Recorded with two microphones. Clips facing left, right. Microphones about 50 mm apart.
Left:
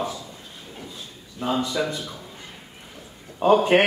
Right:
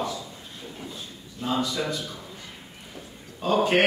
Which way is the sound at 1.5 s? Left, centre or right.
Centre.